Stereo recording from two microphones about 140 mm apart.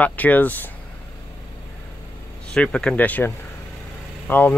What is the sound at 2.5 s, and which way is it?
Speech, 5° left (ahead or behind).